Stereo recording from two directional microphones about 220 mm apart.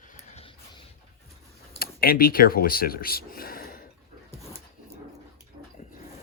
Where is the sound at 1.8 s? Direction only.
45° left (ahead or behind).